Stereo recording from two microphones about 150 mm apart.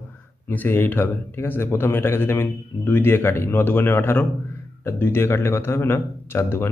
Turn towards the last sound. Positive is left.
turn(degrees=15)  # may be behind; listen again after turning